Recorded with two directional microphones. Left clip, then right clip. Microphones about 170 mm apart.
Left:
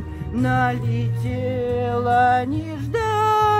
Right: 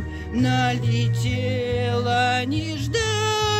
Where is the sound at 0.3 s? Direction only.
30° left (ahead or behind).